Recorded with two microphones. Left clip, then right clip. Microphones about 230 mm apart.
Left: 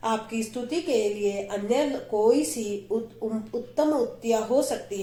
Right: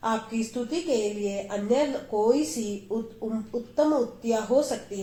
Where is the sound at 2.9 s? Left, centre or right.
Left.